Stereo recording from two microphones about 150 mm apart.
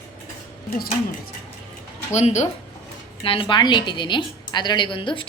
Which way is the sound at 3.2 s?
35° left (ahead or behind).